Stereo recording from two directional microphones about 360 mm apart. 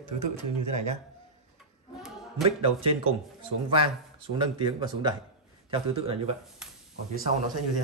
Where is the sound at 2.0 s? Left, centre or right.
Centre.